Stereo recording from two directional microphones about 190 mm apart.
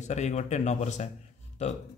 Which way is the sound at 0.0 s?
35° left (ahead or behind).